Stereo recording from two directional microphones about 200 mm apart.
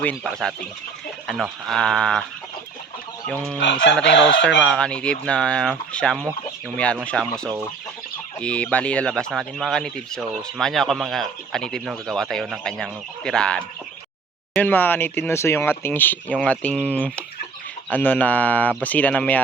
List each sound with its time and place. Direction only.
0.0 s speech: 5° left (ahead or behind)
3.6 s speech: 60° left (ahead or behind)
4.6 s speech: 5° left (ahead or behind)